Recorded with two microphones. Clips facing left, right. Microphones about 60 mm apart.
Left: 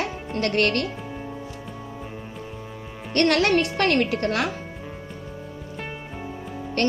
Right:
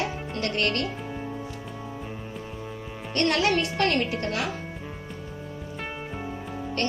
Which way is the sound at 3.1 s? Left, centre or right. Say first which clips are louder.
Left 4 dB; left.